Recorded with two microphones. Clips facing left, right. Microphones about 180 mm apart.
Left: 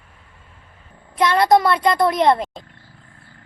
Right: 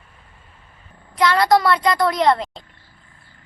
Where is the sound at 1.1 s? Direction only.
25° left (ahead or behind).